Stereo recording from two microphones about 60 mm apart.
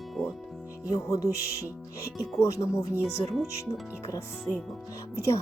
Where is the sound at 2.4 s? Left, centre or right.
Left.